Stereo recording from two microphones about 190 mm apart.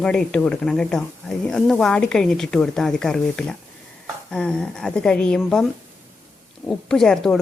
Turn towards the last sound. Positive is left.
turn(degrees=0)  # may be behind; listen again after turning